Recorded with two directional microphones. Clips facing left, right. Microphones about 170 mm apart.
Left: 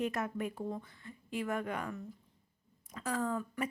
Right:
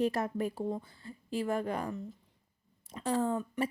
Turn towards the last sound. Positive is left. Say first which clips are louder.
# right 4 dB
turn(degrees=-30)  # may be behind; listen again after turning